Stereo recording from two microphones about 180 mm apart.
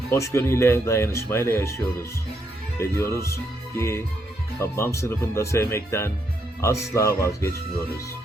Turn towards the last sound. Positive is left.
turn(degrees=15)  # may be behind; listen again after turning